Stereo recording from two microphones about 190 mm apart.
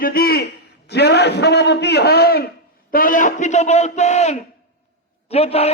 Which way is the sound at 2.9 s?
45° left (ahead or behind).